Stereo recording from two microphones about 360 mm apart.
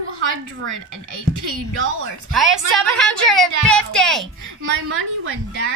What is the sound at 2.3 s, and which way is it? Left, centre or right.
A woman's voice, centre.